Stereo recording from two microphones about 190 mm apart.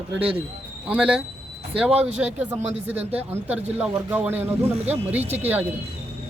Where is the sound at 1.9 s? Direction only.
35° right (ahead or behind).